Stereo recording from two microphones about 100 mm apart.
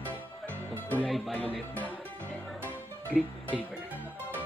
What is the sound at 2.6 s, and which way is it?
Music, 15° left (ahead or behind).